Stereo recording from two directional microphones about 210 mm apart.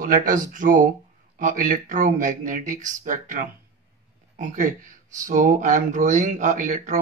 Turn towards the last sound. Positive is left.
turn(degrees=-40)  # may be behind; listen again after turning